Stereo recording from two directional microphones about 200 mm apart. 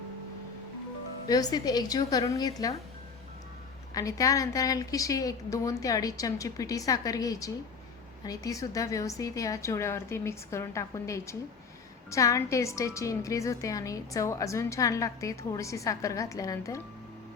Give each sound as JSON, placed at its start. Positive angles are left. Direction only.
{"t": 1.3, "sound": "a woman's voice", "side_deg": 20}
{"t": 3.9, "sound": "a woman's voice", "side_deg": 15}